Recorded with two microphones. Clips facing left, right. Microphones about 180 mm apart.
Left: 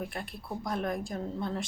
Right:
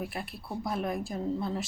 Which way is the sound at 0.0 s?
5° right (ahead or behind).